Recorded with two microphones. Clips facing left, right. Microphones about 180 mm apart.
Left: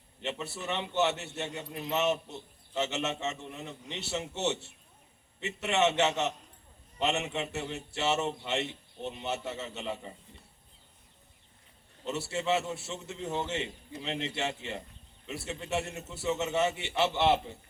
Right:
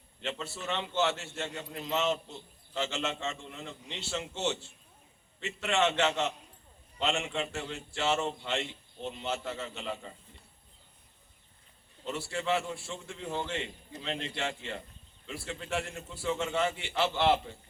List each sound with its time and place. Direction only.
0.2 s a man's voice: 20° left (ahead or behind)
12.0 s a man's voice: 25° left (ahead or behind)